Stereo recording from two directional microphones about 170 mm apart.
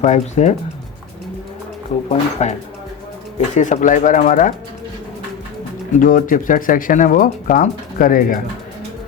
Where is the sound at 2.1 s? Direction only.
40° left (ahead or behind).